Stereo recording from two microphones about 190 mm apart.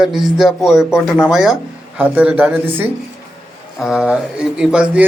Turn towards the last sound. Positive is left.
turn(degrees=-5)  # may be behind; listen again after turning